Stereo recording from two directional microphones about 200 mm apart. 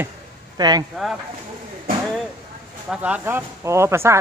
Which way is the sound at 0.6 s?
20° right (ahead or behind).